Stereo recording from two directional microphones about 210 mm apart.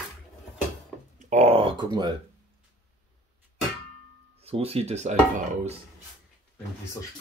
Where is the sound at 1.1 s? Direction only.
35° right (ahead or behind).